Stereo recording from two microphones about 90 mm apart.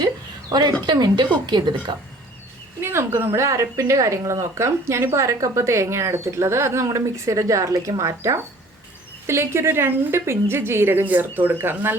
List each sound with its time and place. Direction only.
0.9 s a woman's voice: 50° right (ahead or behind)
2.8 s a woman's voice: 30° right (ahead or behind)